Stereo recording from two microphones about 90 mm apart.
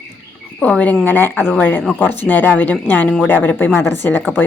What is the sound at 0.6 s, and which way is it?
A woman's voice, 15° left (ahead or behind).